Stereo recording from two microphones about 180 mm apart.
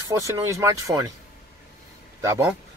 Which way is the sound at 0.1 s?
15° right (ahead or behind).